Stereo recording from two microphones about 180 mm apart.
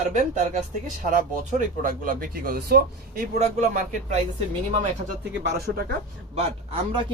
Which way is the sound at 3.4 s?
40° right (ahead or behind).